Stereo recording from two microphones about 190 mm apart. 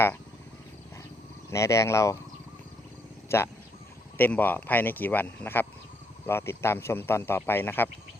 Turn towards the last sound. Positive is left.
turn(degrees=10)  # may be behind; listen again after turning